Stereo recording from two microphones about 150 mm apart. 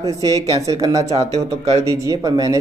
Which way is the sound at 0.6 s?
25° right (ahead or behind).